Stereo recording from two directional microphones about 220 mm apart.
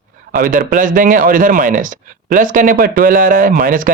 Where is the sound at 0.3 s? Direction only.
40° right (ahead or behind).